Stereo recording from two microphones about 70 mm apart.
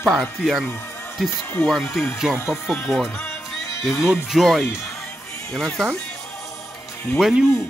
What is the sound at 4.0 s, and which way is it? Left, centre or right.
Speech, centre.